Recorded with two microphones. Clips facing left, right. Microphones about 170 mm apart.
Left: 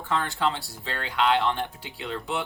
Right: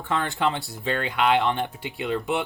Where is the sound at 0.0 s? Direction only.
20° right (ahead or behind).